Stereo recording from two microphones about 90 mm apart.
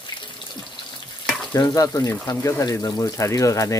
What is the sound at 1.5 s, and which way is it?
Speech, 40° left (ahead or behind).